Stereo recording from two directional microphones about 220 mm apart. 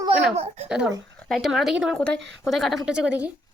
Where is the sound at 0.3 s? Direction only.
30° right (ahead or behind).